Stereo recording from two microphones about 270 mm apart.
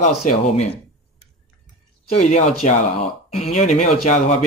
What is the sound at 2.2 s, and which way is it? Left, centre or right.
Speech, left.